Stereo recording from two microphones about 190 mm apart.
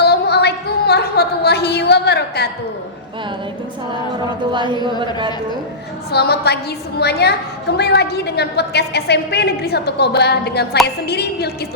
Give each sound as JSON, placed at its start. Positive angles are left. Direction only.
{"t": 0.0, "sound": "music", "side_deg": 60}
{"t": 4.5, "sound": "speech", "side_deg": -25}
{"t": 6.1, "sound": "a woman's voice", "side_deg": 60}